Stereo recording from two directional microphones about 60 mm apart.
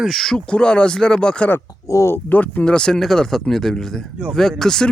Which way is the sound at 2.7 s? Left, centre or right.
Centre.